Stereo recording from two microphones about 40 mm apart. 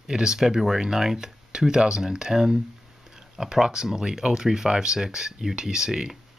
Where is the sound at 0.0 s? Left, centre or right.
Centre.